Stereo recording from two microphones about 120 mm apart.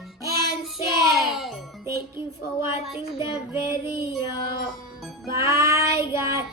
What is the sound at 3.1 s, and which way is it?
Music, 45° left (ahead or behind).